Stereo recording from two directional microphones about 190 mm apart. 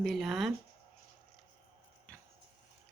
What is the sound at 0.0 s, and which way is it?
Speech, centre (ahead or behind).